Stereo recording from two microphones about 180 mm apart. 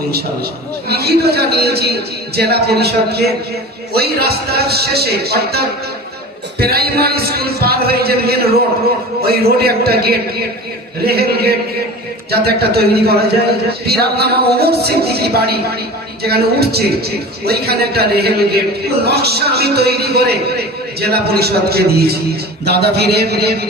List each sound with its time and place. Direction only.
0.9 s a man's voice: 60° right (ahead or behind)